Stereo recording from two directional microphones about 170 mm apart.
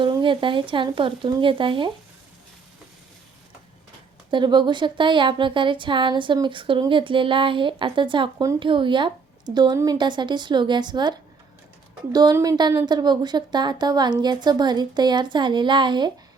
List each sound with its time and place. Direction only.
0.0 s a woman's voice: 30° right (ahead or behind)
4.3 s a woman's voice: 25° right (ahead or behind)
12.1 s a woman's voice: 20° right (ahead or behind)